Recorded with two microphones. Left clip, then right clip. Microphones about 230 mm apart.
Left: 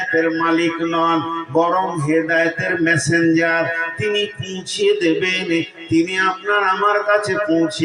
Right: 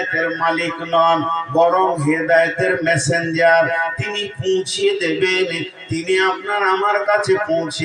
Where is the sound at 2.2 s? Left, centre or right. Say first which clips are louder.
Right 3 dB; right.